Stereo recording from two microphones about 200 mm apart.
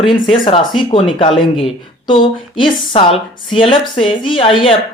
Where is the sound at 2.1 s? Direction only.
25° left (ahead or behind).